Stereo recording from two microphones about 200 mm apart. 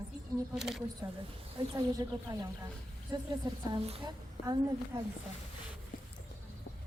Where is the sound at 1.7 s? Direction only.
20° right (ahead or behind).